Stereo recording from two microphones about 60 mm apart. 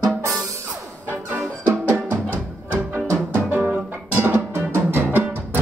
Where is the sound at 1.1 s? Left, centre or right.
Right.